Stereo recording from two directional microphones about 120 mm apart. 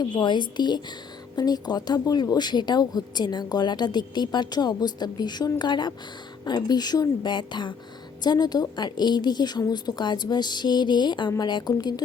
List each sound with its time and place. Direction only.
0.0 s speech: 40° left (ahead or behind)